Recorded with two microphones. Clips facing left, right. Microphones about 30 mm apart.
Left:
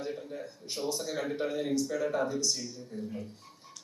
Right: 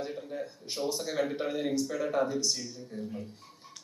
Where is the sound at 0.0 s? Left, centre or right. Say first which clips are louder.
Right 1 dB; centre.